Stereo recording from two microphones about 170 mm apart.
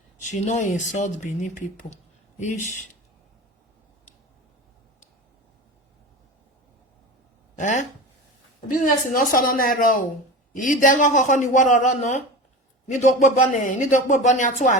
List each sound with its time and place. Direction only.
0.3 s speech: 45° left (ahead or behind)
2.5 s speech: 45° left (ahead or behind)
7.5 s speech: 45° left (ahead or behind)
8.6 s speech: 55° left (ahead or behind)